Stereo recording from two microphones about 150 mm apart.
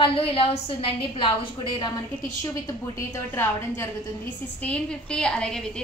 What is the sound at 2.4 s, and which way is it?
A woman's voice, 20° left (ahead or behind).